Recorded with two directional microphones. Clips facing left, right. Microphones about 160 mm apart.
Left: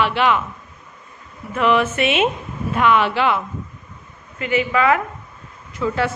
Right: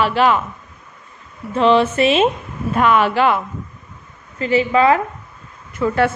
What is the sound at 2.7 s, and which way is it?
Speech, 40° right (ahead or behind).